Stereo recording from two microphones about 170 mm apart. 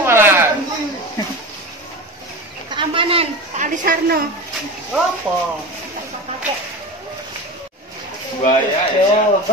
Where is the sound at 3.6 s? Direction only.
50° right (ahead or behind).